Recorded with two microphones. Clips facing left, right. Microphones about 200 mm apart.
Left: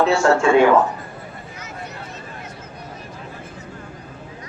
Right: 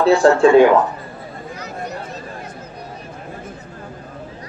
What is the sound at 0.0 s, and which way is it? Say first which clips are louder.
Speech: right 4 dB; 35° right (ahead or behind).